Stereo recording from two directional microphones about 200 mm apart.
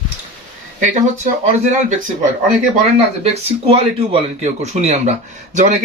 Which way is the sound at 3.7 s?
30° right (ahead or behind).